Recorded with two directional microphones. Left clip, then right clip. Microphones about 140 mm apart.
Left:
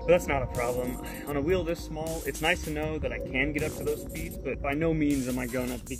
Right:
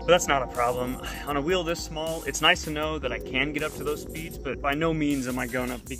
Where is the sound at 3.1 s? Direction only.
20° left (ahead or behind).